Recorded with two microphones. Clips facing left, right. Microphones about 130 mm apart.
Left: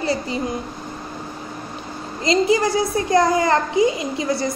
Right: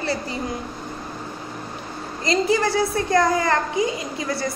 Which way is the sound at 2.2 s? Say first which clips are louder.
Left 3 dB; 20° left (ahead or behind).